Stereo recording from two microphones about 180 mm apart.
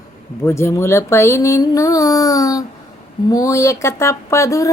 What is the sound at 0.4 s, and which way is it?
A woman's voice, 15° left (ahead or behind).